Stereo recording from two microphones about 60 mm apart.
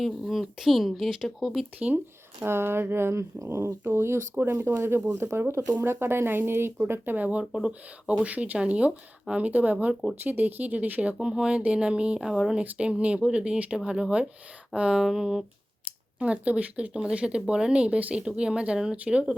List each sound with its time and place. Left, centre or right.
0.0 s speech: centre
2.4 s speech: right
4.9 s speech: right
5.5 s speech: right
11.2 s speech: centre
16.1 s speech: right